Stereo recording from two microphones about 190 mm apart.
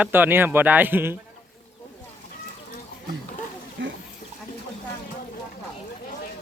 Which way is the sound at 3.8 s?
70° right (ahead or behind).